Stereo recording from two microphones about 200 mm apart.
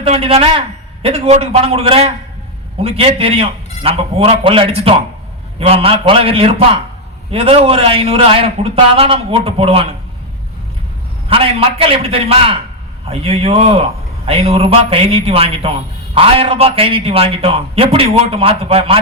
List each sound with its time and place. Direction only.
0.0 s a man's voice: 30° right (ahead or behind)
11.3 s a man's voice: 25° right (ahead or behind)